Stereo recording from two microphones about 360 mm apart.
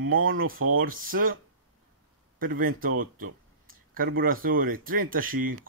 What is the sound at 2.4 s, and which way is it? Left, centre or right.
A man's voice, right.